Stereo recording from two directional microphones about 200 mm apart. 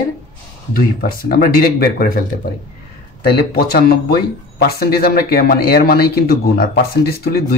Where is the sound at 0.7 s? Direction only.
45° left (ahead or behind).